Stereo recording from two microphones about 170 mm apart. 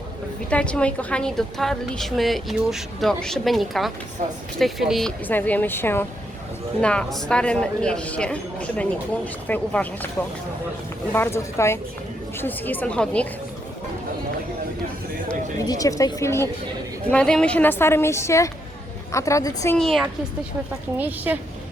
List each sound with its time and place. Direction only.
0.5 s a woman's voice: 5° left (ahead or behind)
5.3 s speech: 10° left (ahead or behind)
11.1 s speech: 15° left (ahead or behind)
15.6 s speech: 20° left (ahead or behind)
19.7 s a woman's voice: centre (ahead or behind)